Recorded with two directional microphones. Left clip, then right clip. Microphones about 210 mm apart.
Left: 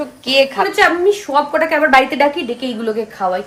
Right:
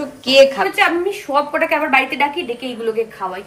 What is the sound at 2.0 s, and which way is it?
Speech, 20° left (ahead or behind).